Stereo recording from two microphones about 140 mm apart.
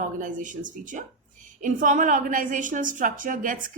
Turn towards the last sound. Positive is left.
turn(degrees=-70)  # may be behind; listen again after turning